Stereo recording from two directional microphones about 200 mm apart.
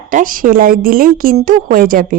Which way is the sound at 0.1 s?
45° right (ahead or behind).